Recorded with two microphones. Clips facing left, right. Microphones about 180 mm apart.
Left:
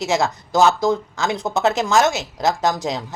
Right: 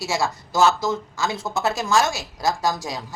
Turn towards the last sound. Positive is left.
turn(degrees=20)  # may be behind; listen again after turning